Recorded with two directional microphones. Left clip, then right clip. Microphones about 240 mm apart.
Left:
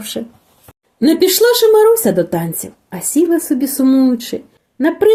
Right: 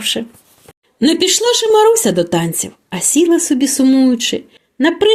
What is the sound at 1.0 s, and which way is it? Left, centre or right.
Speech, right.